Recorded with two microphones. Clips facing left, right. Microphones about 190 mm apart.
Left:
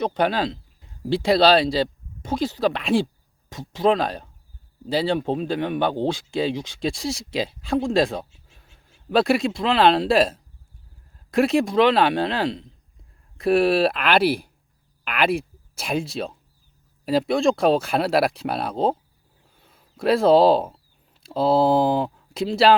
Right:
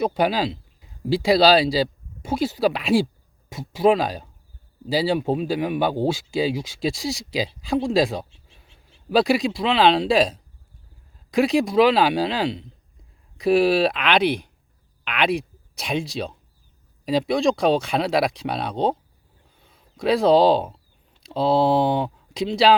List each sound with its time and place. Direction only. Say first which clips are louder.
0.0 s speech: right 1 dB; 5° right (ahead or behind)
8.3 s a sound: right 1 dB; 25° right (ahead or behind)
9.0 s speech: even; centre (ahead or behind)